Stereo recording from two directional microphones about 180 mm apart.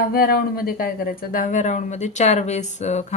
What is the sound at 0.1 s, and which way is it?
Speech, 55° left (ahead or behind).